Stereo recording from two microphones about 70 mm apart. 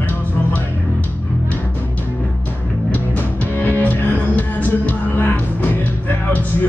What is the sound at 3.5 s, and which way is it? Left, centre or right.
Music, left.